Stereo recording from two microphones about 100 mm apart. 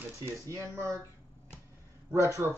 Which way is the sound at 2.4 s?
25° right (ahead or behind).